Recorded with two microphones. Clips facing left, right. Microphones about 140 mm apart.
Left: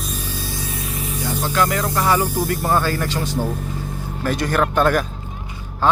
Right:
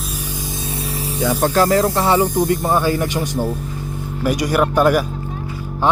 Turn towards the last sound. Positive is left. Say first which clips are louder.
# right 3 dB
turn(degrees=-10)  # may be behind; listen again after turning